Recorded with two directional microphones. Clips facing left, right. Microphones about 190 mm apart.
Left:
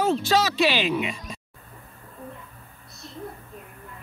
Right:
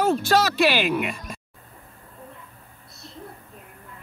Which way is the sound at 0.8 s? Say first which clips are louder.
Right 1 dB; 55° right (ahead or behind).